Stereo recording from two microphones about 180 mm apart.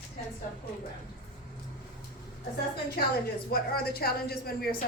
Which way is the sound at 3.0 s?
60° left (ahead or behind).